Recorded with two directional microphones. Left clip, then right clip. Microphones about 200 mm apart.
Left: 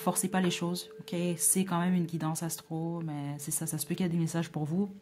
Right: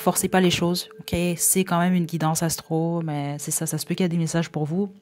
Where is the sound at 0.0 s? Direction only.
35° right (ahead or behind).